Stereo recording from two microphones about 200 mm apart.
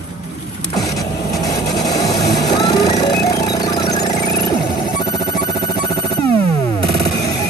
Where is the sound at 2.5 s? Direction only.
20° left (ahead or behind).